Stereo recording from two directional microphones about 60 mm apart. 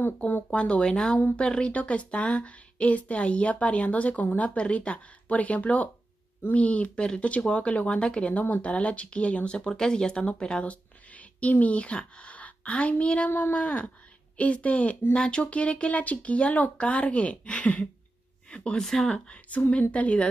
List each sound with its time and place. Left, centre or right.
0.0 s speech: left
0.5 s speech: centre